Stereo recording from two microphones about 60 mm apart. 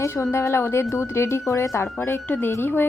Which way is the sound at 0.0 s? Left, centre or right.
Left.